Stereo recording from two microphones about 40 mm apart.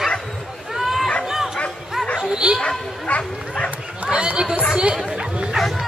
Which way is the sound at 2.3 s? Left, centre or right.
Right.